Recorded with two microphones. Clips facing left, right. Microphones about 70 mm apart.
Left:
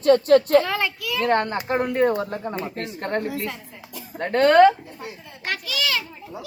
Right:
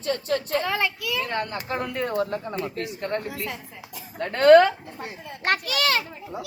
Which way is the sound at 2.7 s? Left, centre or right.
Left.